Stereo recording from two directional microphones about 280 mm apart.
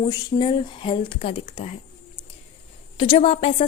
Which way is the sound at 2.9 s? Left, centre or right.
Centre.